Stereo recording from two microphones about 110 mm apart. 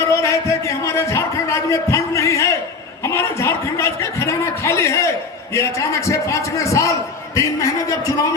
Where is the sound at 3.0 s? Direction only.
25° left (ahead or behind).